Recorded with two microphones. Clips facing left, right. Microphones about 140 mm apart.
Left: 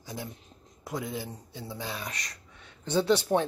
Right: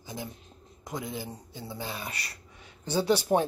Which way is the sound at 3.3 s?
20° right (ahead or behind).